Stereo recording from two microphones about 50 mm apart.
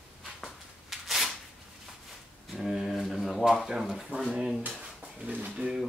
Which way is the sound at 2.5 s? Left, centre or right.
Centre.